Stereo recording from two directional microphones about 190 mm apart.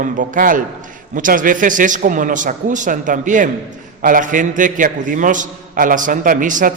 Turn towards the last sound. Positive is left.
turn(degrees=-45)  # may be behind; listen again after turning